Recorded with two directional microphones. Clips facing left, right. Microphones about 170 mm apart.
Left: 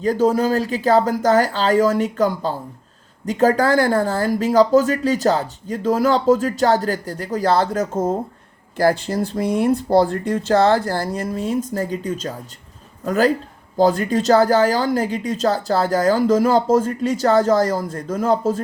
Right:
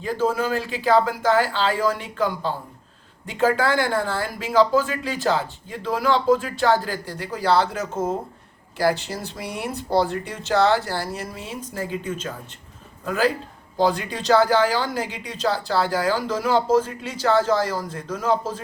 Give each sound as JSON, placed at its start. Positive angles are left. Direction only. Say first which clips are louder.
{"t": 0.0, "sound": "speech", "louder": "left 6 dB", "side_deg": 40}